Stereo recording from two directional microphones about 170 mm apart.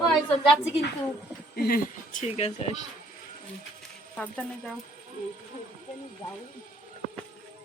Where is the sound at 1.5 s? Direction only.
60° left (ahead or behind).